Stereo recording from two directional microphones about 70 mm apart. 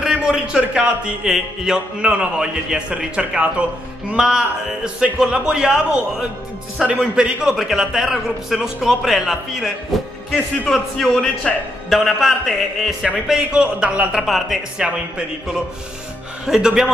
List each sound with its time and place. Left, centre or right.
0.0 s a man's voice: centre
10.7 s a man's voice: centre
11.9 s a man's voice: centre
13.0 s speech: centre
14.1 s a man's voice: centre
14.8 s speech: centre